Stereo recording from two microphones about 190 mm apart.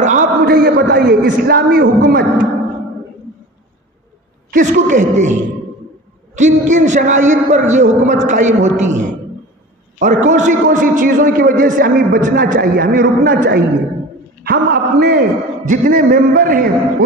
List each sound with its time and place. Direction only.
0.0 s a sound: 40° right (ahead or behind)
0.4 s a man's voice: 55° right (ahead or behind)
4.5 s a man's voice: 45° right (ahead or behind)